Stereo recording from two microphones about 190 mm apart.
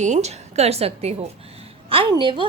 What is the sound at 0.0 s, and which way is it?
A woman's voice, 35° right (ahead or behind).